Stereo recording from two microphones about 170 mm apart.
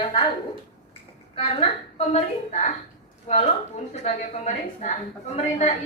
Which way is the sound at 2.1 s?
40° left (ahead or behind).